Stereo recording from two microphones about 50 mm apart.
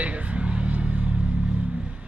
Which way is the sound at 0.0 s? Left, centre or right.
Right.